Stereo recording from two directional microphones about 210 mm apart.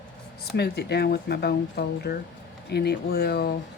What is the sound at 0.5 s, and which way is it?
Speech, 50° left (ahead or behind).